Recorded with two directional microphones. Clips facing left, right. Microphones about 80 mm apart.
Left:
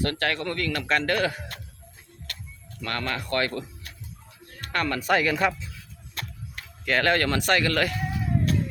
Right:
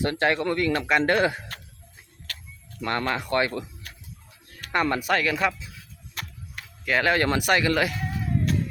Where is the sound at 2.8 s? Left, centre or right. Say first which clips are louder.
Right 4 dB; right.